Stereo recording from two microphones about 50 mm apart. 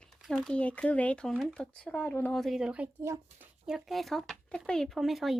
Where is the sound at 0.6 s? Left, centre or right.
Left.